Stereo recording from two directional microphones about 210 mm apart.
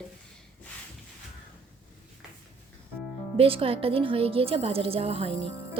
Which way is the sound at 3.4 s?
25° right (ahead or behind).